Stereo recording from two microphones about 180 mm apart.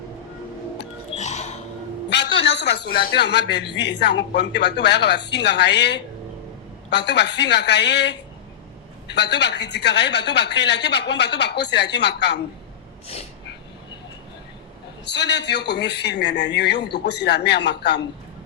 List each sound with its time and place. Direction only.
1.1 s a sound: 40° left (ahead or behind)
2.0 s a man's voice: 70° left (ahead or behind)
15.0 s speech: 70° left (ahead or behind)